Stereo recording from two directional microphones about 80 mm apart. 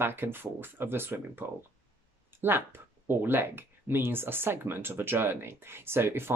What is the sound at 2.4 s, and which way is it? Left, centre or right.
Speech, right.